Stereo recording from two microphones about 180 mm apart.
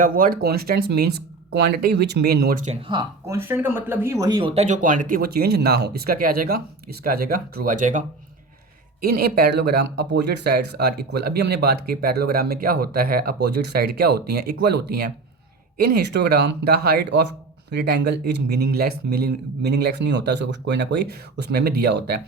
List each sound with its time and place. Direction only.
0.0 s speech: 50° right (ahead or behind)
2.6 s speech: 30° right (ahead or behind)
3.3 s speech: 10° right (ahead or behind); by 8.0 s 45° right (ahead or behind)
9.0 s speech: 60° right (ahead or behind)